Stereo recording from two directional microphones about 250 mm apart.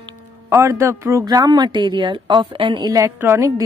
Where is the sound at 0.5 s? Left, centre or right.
Centre.